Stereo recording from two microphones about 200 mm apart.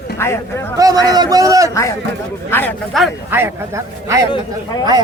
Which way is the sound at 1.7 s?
15° left (ahead or behind).